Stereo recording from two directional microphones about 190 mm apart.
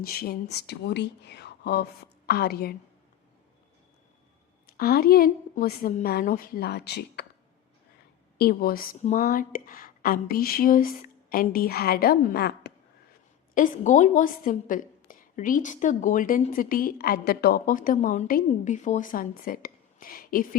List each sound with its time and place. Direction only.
0.0 s speech: 55° left (ahead or behind)
4.8 s a woman's voice: 50° left (ahead or behind)
8.4 s a woman's voice: 55° left (ahead or behind)
9.0 s a woman's voice: 40° left (ahead or behind); by 12.7 s 55° left (ahead or behind)
13.5 s a woman's voice: 45° left (ahead or behind)